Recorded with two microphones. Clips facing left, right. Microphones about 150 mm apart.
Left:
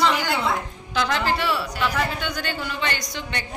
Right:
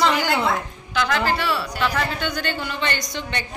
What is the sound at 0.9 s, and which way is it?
Speech, 25° left (ahead or behind).